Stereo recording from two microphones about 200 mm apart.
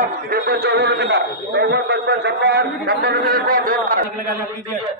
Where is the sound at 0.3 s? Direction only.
55° right (ahead or behind).